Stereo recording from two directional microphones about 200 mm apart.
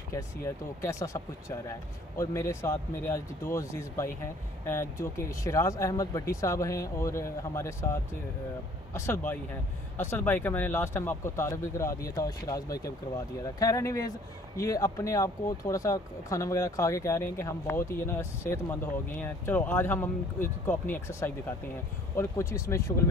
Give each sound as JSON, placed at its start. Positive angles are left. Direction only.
{"t": 0.1, "sound": "speech", "side_deg": 15}